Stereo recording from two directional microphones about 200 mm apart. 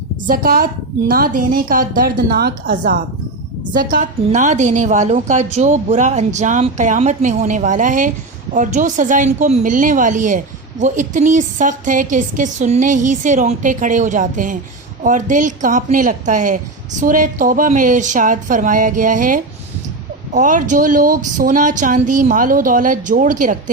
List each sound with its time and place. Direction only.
0.3 s a woman's voice: 45° right (ahead or behind)
3.8 s a woman's voice: 40° right (ahead or behind)